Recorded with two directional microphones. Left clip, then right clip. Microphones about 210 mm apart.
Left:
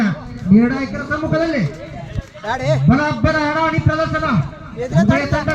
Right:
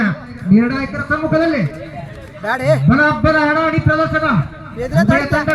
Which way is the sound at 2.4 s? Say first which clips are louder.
Right 3 dB; 45° right (ahead or behind).